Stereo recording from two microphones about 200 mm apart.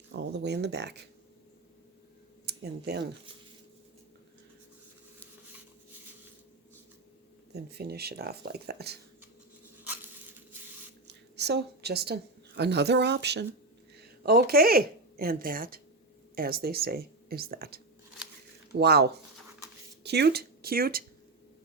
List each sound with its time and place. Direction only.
0.1 s speech: 60° right (ahead or behind)
2.5 s speech: 55° right (ahead or behind)
7.5 s speech: 55° right (ahead or behind)
11.3 s a woman's voice: 55° right (ahead or behind)